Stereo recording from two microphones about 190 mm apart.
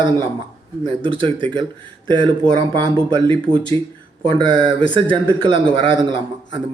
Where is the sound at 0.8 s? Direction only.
25° right (ahead or behind).